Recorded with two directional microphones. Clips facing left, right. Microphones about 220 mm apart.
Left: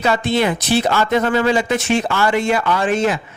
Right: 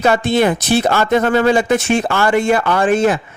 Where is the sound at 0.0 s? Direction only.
45° right (ahead or behind).